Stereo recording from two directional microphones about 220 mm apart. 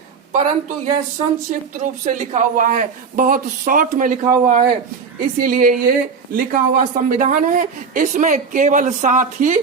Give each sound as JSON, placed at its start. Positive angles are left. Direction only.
{"t": 0.3, "sound": "speech", "side_deg": -30}